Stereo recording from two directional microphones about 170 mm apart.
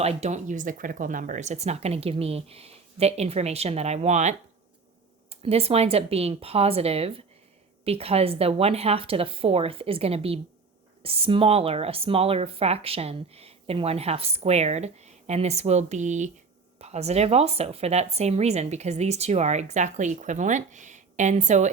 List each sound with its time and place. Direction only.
0.0 s speech: 40° right (ahead or behind)